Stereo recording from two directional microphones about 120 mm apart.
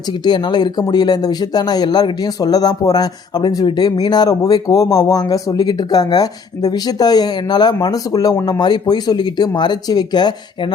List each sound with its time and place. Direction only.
0.1 s speech: 40° left (ahead or behind)